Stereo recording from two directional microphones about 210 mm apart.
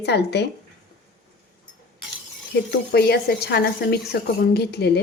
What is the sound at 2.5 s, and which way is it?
Speech, 50° left (ahead or behind).